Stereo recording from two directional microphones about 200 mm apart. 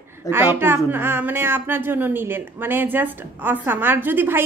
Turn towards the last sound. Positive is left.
turn(degrees=-10)  # may be behind; listen again after turning